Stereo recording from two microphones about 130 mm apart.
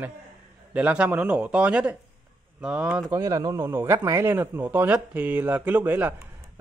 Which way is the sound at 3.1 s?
25° right (ahead or behind).